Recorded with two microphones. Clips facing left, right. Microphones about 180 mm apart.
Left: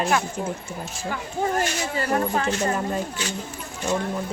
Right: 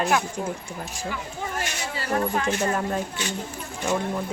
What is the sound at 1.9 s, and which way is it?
Speech, 40° left (ahead or behind).